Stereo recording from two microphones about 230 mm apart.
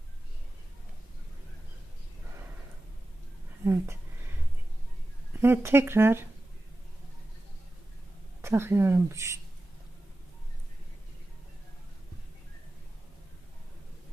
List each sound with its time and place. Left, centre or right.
3.6 s speech: centre
5.4 s a woman's voice: centre
8.4 s a woman's voice: centre